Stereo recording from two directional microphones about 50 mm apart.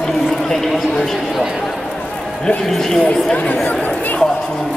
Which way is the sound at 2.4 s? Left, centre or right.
Centre.